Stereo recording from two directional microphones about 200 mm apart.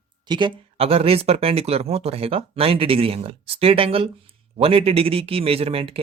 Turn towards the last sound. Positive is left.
turn(degrees=-30)  # may be behind; listen again after turning